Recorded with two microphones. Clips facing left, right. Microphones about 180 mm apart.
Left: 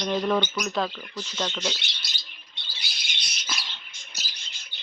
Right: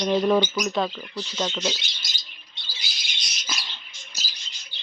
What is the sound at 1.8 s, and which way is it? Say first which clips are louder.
Bird: even; 65° left (ahead or behind).